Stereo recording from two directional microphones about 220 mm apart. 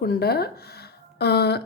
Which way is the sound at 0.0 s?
45° left (ahead or behind).